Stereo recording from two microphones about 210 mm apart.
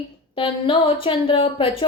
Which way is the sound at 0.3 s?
25° left (ahead or behind).